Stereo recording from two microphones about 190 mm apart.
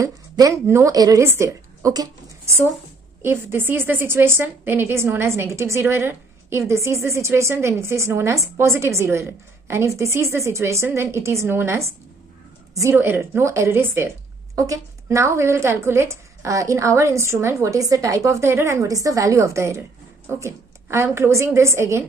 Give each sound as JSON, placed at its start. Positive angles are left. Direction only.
{"t": 0.0, "sound": "a woman's voice", "side_deg": -15}